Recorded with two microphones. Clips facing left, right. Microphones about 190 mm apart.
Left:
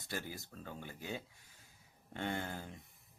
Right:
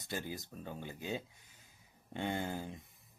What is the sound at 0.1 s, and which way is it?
Speech, 20° right (ahead or behind).